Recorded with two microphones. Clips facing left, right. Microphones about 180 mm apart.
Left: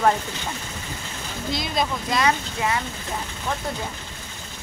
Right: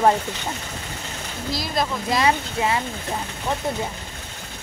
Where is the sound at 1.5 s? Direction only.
Centre (ahead or behind).